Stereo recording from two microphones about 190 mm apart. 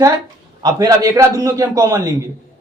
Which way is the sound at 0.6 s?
20° right (ahead or behind).